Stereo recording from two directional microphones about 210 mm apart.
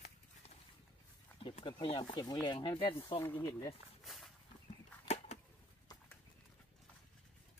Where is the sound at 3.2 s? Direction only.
15° left (ahead or behind).